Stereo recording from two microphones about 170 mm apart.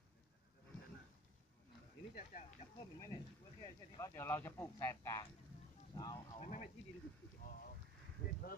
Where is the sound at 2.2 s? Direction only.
45° left (ahead or behind).